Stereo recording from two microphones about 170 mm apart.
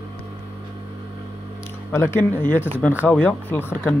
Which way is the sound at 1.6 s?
15° left (ahead or behind).